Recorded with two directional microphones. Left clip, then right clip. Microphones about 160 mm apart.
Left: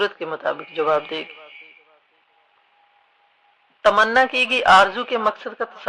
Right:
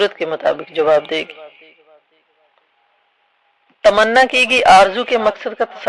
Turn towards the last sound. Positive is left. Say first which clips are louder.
# right 8 dB
turn(degrees=-35)  # may be behind; listen again after turning